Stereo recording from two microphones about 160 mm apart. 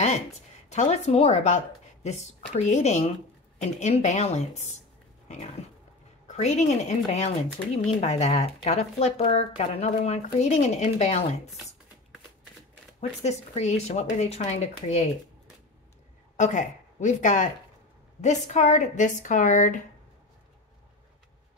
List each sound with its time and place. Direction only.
0.7 s speech: 45° left (ahead or behind)
6.2 s speech: 45° left (ahead or behind)
13.2 s speech: 45° left (ahead or behind)
16.3 s speech: 50° left (ahead or behind)